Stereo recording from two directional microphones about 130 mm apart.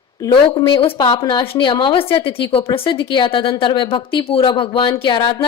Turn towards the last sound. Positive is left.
turn(degrees=35)  # may be behind; listen again after turning